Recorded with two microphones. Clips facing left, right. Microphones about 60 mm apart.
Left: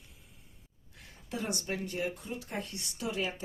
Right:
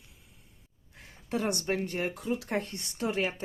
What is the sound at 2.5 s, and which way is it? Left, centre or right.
Speech, right.